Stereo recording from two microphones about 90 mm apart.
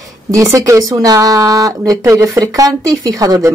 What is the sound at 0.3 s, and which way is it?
Speech, 35° right (ahead or behind).